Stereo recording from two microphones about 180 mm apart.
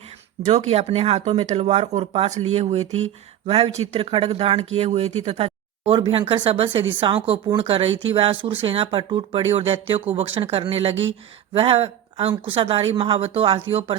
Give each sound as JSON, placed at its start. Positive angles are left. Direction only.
{"t": 0.4, "sound": "speech", "side_deg": -35}